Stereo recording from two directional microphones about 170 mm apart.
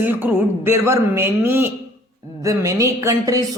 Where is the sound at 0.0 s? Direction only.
10° right (ahead or behind).